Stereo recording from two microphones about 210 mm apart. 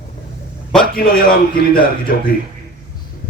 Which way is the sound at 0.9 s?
45° left (ahead or behind).